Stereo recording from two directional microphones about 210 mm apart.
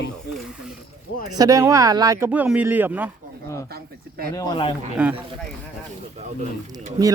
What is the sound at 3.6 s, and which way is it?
Speech, 45° right (ahead or behind).